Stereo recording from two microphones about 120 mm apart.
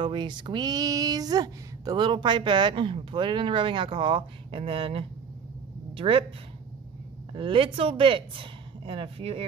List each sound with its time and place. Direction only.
0.0 s female singing: 40° right (ahead or behind)
5.9 s speech: 50° right (ahead or behind)
7.3 s speech: 50° right (ahead or behind)